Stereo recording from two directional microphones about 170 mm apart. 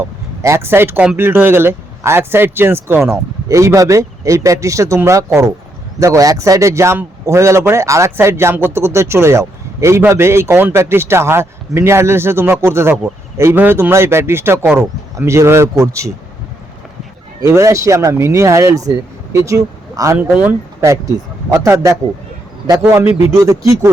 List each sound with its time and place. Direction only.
0.0 s a man's voice: 15° right (ahead or behind)
17.4 s a man's voice: 15° right (ahead or behind)